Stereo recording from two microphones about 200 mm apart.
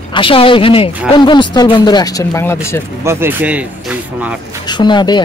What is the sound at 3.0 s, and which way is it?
Speech, 15° right (ahead or behind).